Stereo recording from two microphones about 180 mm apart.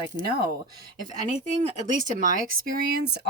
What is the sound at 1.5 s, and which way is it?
Speech, 45° right (ahead or behind).